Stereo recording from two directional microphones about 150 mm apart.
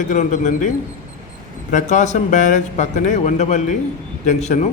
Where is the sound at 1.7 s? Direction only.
55° left (ahead or behind).